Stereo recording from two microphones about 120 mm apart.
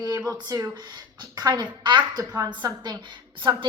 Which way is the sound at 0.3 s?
30° right (ahead or behind).